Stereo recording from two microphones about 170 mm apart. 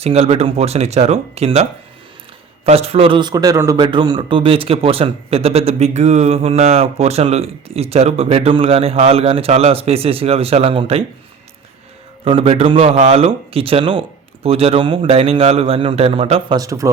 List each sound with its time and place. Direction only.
0.0 s a man's voice: 35° right (ahead or behind)
2.6 s a man's voice: 35° right (ahead or behind)
12.2 s a man's voice: 35° right (ahead or behind)
16.6 s speech: 20° right (ahead or behind)